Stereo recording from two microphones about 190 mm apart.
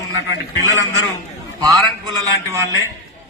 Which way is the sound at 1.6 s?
20° right (ahead or behind).